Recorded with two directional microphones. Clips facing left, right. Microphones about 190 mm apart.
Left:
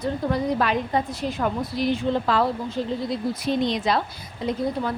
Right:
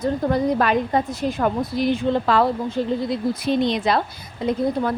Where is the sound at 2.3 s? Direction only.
60° right (ahead or behind).